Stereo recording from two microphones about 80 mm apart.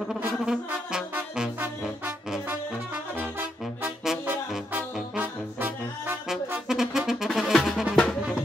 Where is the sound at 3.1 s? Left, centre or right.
Right.